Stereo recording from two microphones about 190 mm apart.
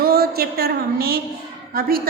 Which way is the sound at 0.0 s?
55° right (ahead or behind).